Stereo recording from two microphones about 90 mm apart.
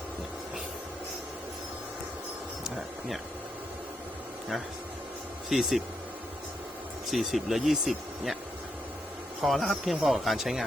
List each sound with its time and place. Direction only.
5.5 s speech: centre (ahead or behind)
7.1 s speech: centre (ahead or behind)
9.4 s speech: centre (ahead or behind)